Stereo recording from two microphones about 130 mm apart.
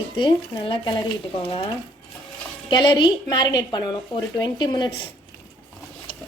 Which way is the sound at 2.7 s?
35° left (ahead or behind).